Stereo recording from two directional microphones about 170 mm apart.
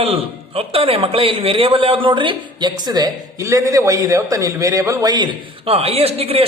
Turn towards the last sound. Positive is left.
turn(degrees=-35)  # may be behind; listen again after turning